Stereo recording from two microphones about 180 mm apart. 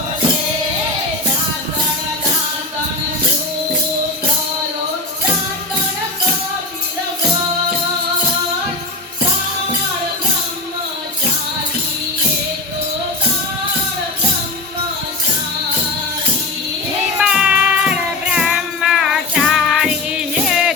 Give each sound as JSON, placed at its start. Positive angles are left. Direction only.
{"t": 17.2, "sound": "music", "side_deg": -5}